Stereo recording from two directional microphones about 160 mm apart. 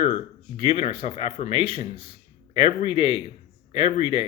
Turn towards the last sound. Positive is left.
turn(degrees=35)  # may be behind; listen again after turning